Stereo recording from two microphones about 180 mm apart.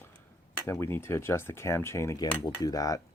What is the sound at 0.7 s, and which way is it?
Speech, 15° left (ahead or behind).